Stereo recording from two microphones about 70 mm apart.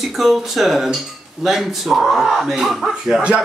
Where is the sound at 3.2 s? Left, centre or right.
Centre.